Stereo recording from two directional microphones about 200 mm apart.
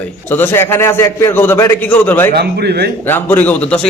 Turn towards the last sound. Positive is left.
turn(degrees=5)  # may be behind; listen again after turning